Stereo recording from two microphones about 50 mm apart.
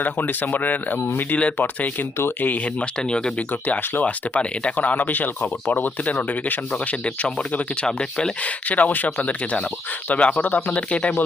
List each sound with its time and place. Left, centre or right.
0.0 s speech: left
2.8 s speech: centre
3.5 s speech: left
4.0 s speech: left
8.4 s speech: left